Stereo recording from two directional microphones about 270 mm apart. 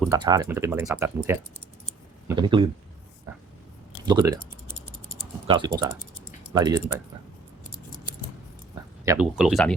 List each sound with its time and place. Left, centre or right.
0.1 s speech: centre
4.0 s speech: centre
5.5 s speech: centre
9.0 s speech: centre